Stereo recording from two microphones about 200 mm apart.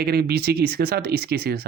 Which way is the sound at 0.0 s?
50° right (ahead or behind).